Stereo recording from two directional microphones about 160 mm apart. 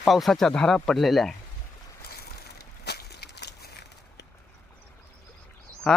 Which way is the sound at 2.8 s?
90° left.